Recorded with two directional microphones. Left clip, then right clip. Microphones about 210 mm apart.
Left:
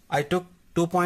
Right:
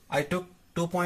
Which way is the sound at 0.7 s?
40° left (ahead or behind).